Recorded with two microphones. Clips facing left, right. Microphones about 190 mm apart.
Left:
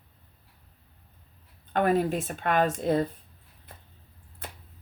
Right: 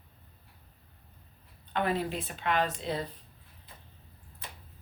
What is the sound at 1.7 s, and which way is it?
Speech, 45° left (ahead or behind).